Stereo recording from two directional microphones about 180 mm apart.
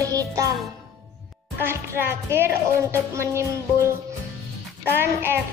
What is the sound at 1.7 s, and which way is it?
Music, 15° right (ahead or behind).